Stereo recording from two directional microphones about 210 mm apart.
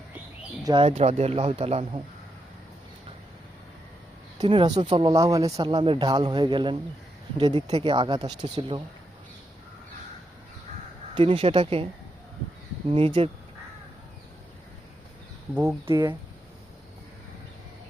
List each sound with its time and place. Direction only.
0.6 s speech: 25° right (ahead or behind)
4.4 s speech: 20° right (ahead or behind)
11.1 s speech: 25° right (ahead or behind)
13.2 s speech: 30° right (ahead or behind)
15.5 s speech: 10° right (ahead or behind)